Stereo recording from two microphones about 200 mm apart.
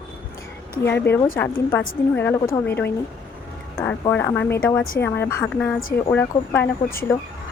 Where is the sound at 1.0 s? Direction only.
10° left (ahead or behind).